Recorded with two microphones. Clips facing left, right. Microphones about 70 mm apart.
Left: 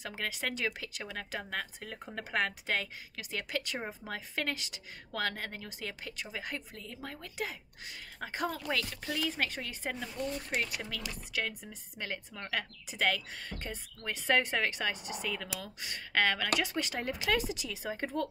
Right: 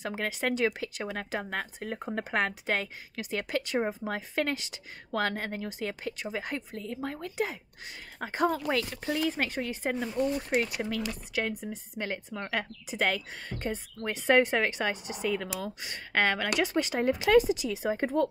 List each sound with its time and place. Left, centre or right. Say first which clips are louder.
0.2 s a woman's voice: right 7 dB; right